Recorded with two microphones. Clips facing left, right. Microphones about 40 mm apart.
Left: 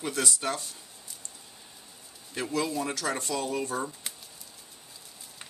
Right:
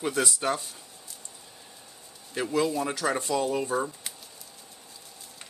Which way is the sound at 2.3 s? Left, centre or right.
Centre.